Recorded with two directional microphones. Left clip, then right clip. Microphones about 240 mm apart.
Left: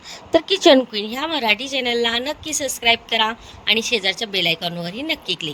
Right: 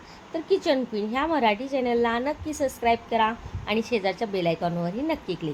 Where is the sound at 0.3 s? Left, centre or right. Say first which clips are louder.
Left 10 dB; left.